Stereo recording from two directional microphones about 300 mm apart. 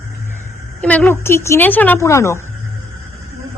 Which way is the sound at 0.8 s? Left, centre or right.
Centre.